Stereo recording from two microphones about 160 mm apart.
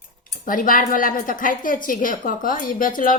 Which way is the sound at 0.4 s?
60° left (ahead or behind).